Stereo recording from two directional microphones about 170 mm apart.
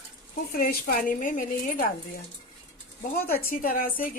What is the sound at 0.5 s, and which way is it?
A woman's voice, 60° left (ahead or behind).